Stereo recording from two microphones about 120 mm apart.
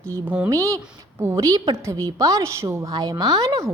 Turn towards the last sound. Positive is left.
turn(degrees=-30)  # may be behind; listen again after turning